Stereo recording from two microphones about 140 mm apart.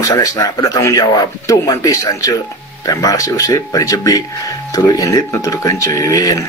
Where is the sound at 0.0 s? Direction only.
25° left (ahead or behind).